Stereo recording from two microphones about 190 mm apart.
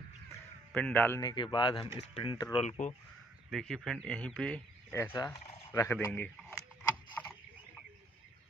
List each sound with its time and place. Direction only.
0.7 s a man's voice: 10° left (ahead or behind); by 2.6 s 25° left (ahead or behind)
3.4 s a man's voice: centre (ahead or behind)
7.2 s a sound: 10° left (ahead or behind)